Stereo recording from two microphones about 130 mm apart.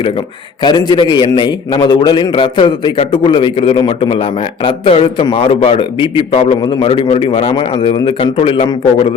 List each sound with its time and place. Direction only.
0.6 s a man's voice: 35° left (ahead or behind)
6.6 s a man's voice: 35° left (ahead or behind)
6.8 s a man's voice: 45° left (ahead or behind)